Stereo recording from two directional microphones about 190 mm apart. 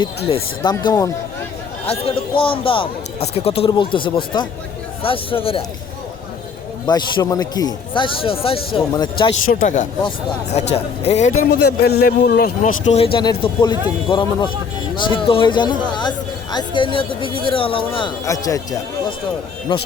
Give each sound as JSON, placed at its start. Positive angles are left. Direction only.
{"t": 0.3, "sound": "speech", "side_deg": 25}
{"t": 6.8, "sound": "speech", "side_deg": 20}
{"t": 9.5, "sound": "a man's voice", "side_deg": 45}
{"t": 11.1, "sound": "a man's voice", "side_deg": 35}
{"t": 11.3, "sound": "speech", "side_deg": 60}
{"t": 12.6, "sound": "speech", "side_deg": 35}
{"t": 18.3, "sound": "speech", "side_deg": 15}
{"t": 19.7, "sound": "speech", "side_deg": 25}